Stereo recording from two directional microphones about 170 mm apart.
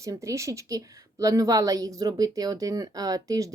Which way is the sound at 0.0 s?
20° right (ahead or behind).